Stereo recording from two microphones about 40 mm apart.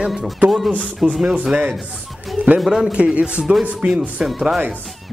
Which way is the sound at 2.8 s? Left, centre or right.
Right.